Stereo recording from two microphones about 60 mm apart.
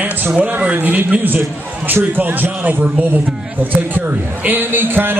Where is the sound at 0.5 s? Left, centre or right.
Right.